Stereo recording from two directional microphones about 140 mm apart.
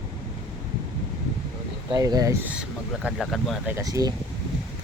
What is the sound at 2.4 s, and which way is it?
Speech, 10° right (ahead or behind).